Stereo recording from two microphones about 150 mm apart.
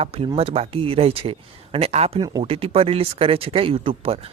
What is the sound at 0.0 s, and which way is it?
A man's voice, 40° right (ahead or behind).